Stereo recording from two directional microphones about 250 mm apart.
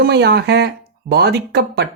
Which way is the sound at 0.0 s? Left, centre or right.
Right.